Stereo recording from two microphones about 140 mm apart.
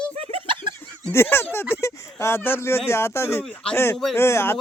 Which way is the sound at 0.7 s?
15° left (ahead or behind).